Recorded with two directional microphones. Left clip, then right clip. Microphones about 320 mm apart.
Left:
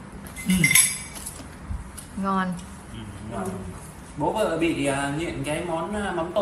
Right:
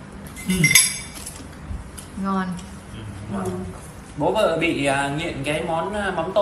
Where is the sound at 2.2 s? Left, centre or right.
Centre.